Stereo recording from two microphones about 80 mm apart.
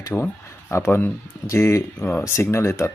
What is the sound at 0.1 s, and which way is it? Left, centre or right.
Speech, left.